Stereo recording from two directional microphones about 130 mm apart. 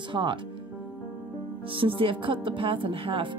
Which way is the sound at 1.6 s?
40° right (ahead or behind).